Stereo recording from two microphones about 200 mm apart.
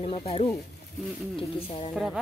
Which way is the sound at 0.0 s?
30° left (ahead or behind).